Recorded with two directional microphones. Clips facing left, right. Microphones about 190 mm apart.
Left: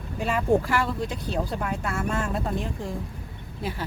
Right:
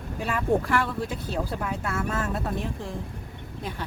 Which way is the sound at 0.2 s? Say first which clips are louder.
Left 2 dB; centre (ahead or behind).